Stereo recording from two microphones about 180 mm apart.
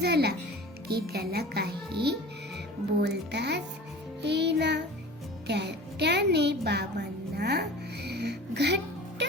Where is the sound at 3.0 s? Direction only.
70° right (ahead or behind).